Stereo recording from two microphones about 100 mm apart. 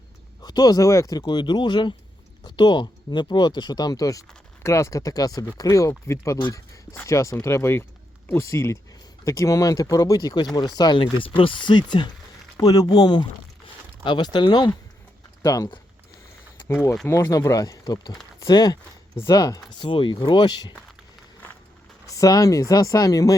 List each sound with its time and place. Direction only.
0.4 s speech: 45° left (ahead or behind)
11.0 s speech: 60° left (ahead or behind)
12.5 s speech: 40° left (ahead or behind)
15.4 s speech: 35° left (ahead or behind)
16.6 s speech: 25° left (ahead or behind)
19.8 s speech: 55° left (ahead or behind)
22.0 s speech: 35° left (ahead or behind)